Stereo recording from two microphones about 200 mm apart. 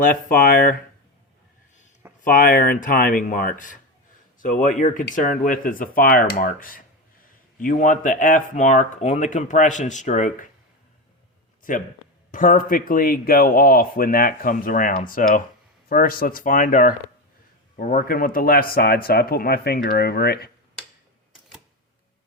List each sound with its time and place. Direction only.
0.0 s speech: 45° left (ahead or behind)
2.2 s speech: 45° left (ahead or behind)
11.7 s speech: 40° left (ahead or behind)